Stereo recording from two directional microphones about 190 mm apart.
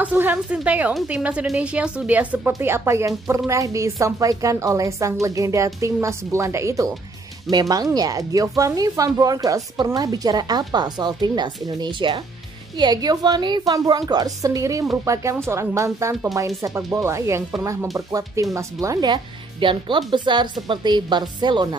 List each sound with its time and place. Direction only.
0.0 s a woman's voice: 10° right (ahead or behind)